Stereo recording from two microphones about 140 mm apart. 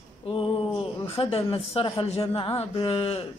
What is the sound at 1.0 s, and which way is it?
A woman's voice, 45° left (ahead or behind).